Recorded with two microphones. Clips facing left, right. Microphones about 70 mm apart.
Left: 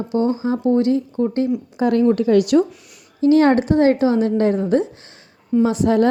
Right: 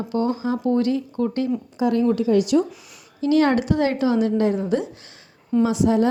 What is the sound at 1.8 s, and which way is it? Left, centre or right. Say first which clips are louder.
Speech: left 4 dB; left.